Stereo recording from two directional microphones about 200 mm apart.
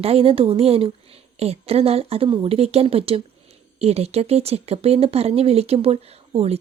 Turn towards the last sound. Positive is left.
turn(degrees=-30)  # may be behind; listen again after turning